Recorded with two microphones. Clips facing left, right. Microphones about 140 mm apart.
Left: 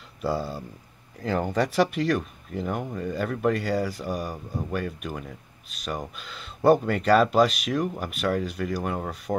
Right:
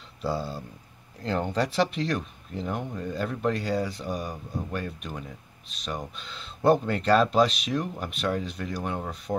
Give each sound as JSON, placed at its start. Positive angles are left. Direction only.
{"t": 0.2, "sound": "speech", "side_deg": 5}